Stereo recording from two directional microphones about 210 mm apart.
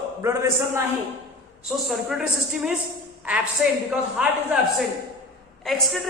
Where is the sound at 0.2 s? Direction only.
10° right (ahead or behind).